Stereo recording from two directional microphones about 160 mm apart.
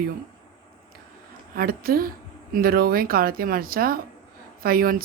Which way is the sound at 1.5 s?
65° right (ahead or behind).